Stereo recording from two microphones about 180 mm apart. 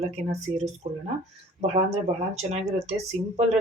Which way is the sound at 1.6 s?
35° right (ahead or behind).